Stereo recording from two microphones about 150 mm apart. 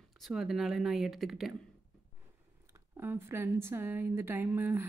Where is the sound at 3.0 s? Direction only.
15° right (ahead or behind).